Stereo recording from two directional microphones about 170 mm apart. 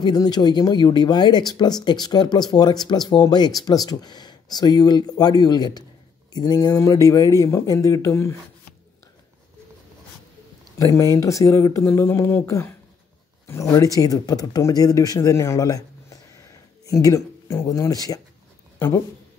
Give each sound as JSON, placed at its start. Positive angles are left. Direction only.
{"t": 0.0, "sound": "speech", "side_deg": 25}
{"t": 10.8, "sound": "speech", "side_deg": 20}